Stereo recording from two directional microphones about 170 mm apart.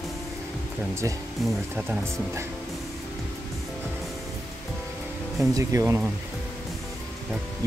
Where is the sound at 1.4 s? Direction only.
Centre (ahead or behind).